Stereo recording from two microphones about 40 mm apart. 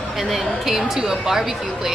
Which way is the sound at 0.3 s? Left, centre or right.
Centre.